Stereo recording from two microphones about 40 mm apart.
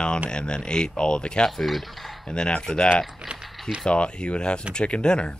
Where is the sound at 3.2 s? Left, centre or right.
Centre.